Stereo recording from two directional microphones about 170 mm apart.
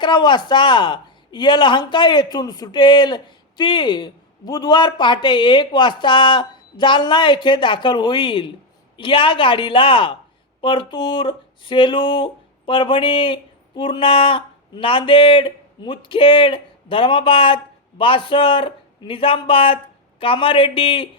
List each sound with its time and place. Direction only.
0.0 s speech: 25° left (ahead or behind)